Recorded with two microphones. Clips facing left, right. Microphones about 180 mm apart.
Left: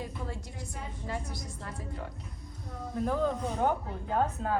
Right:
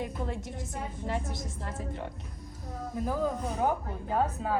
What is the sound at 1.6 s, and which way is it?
Speech, 25° right (ahead or behind).